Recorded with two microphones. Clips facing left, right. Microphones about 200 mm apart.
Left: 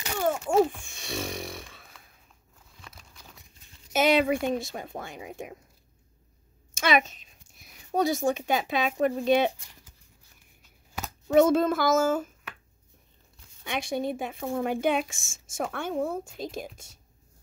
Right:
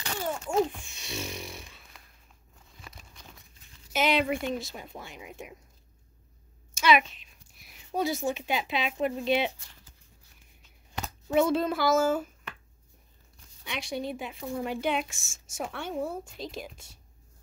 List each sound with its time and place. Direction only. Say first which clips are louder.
0.2 s speech: left 5 dB; 50° left (ahead or behind)
2.8 s a sound: right 1 dB; centre (ahead or behind)
3.9 s speech: left 4 dB; 50° left (ahead or behind)
6.8 s speech: right 1 dB; 45° left (ahead or behind)
10.6 s a sound: even; 5° left (ahead or behind)
11.3 s speech: left 4 dB; 45° left (ahead or behind)
13.7 s speech: left 4 dB; 50° left (ahead or behind)